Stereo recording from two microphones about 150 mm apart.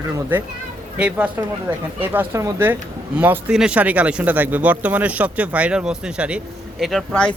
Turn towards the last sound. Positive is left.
turn(degrees=5)  # may be behind; listen again after turning